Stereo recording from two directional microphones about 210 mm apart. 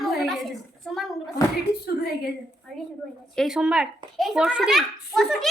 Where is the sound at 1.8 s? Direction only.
50° left (ahead or behind).